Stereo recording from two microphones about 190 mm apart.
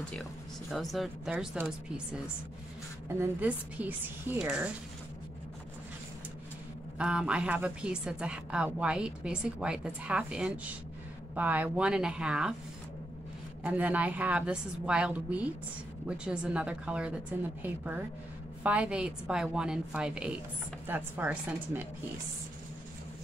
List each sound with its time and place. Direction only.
0.1 s a woman's voice: centre (ahead or behind)
3.2 s a woman's voice: 10° right (ahead or behind)
7.0 s a woman's voice: 5° right (ahead or behind)
13.6 s a woman's voice: 10° right (ahead or behind)